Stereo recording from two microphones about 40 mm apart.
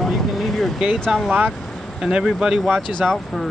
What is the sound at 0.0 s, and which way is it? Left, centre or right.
Vehicle, centre.